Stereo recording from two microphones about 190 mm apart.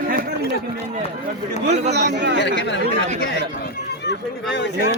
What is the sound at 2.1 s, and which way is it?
Speech, 65° right (ahead or behind).